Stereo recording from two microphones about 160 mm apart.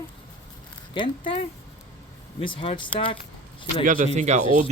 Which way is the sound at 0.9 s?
30° left (ahead or behind).